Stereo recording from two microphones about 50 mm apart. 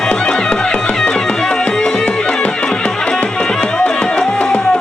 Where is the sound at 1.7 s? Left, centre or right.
Centre.